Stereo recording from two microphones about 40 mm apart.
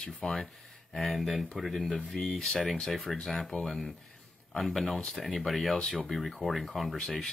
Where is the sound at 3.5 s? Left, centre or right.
Centre.